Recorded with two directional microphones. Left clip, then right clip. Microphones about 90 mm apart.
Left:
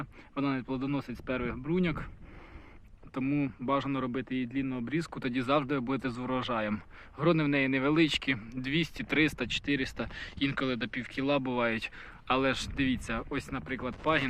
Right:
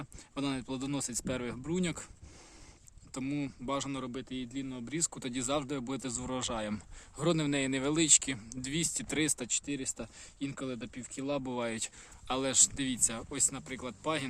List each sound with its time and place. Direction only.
0.0 s speech: 45° right (ahead or behind); by 1.8 s 65° right (ahead or behind)
1.8 s speech: 40° right (ahead or behind)
3.2 s speech: 25° right (ahead or behind)
4.0 s speech: centre (ahead or behind)
4.9 s speech: 20° right (ahead or behind)
6.3 s speech: 45° right (ahead or behind)
9.5 s speech: 20° right (ahead or behind)
11.4 s speech: 40° right (ahead or behind)
13.3 s speech: 20° right (ahead or behind)